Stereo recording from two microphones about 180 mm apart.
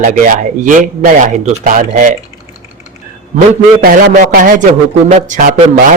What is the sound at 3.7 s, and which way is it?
A man's voice, 50° right (ahead or behind).